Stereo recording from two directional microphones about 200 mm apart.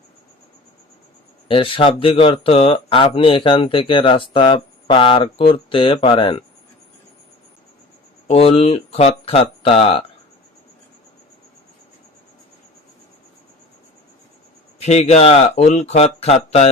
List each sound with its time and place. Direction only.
1.5 s speech: 25° left (ahead or behind)
8.3 s speech: 30° left (ahead or behind)
14.8 s speech: 35° left (ahead or behind)